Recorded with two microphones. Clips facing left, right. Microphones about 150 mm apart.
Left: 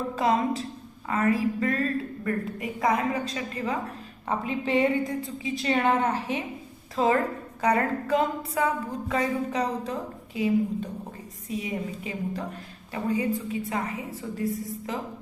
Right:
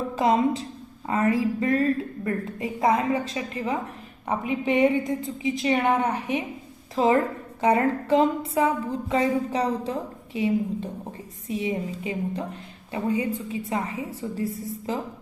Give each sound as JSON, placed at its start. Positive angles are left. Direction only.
{"t": 0.2, "sound": "a woman's voice", "side_deg": -25}